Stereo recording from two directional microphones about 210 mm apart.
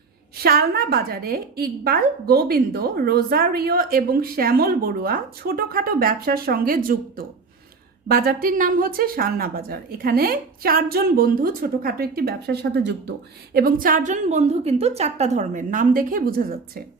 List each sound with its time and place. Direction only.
0.4 s a woman's voice: 45° right (ahead or behind)